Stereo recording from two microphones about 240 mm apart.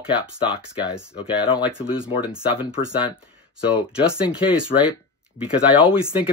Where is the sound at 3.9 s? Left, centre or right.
Centre.